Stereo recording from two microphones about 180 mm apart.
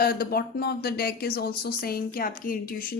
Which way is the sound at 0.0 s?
55° left (ahead or behind).